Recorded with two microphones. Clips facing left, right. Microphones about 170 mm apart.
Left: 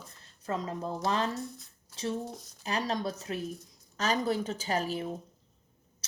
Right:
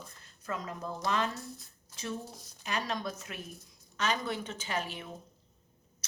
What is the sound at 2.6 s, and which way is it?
Speech, 35° left (ahead or behind).